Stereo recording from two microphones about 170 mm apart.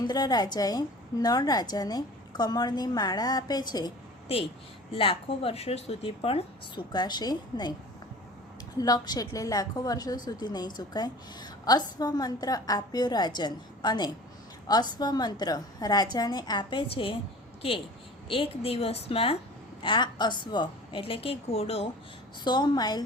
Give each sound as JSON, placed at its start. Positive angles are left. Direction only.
{"t": 0.0, "sound": "a woman's voice", "side_deg": 25}
{"t": 8.8, "sound": "a woman's voice", "side_deg": 20}
{"t": 18.3, "sound": "a woman's voice", "side_deg": 35}
{"t": 22.4, "sound": "a woman's voice", "side_deg": 25}